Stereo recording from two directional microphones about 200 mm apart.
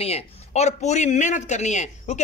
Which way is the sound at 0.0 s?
30° left (ahead or behind).